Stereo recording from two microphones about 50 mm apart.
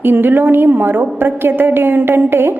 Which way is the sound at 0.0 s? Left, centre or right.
Right.